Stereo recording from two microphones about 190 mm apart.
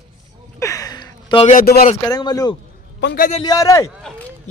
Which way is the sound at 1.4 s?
45° left (ahead or behind).